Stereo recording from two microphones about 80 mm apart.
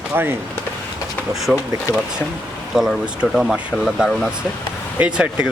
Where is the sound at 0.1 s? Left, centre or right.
Right.